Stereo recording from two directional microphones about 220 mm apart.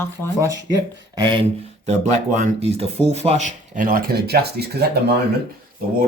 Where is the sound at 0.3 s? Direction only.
15° right (ahead or behind).